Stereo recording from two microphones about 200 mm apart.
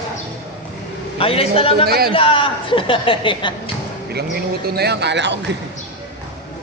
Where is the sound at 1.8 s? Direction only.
50° right (ahead or behind).